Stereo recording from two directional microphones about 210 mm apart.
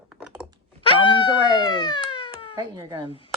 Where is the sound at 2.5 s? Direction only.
15° right (ahead or behind).